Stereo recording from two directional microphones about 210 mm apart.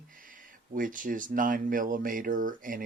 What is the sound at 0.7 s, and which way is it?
Speech, 40° right (ahead or behind).